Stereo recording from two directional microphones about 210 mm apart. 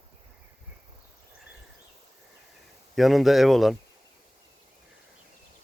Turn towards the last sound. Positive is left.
turn(degrees=0)  # may be behind; listen again after turning